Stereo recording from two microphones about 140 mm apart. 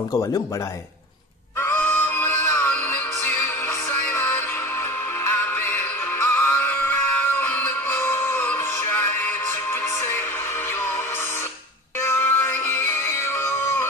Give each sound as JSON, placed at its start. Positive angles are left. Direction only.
{"t": 1.6, "sound": "music", "side_deg": 15}
{"t": 5.2, "sound": "synthetic singing", "side_deg": 15}
{"t": 9.7, "sound": "music", "side_deg": 15}
{"t": 12.0, "sound": "music", "side_deg": 15}